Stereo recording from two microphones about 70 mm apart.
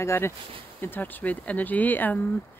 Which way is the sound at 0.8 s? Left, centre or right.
Left.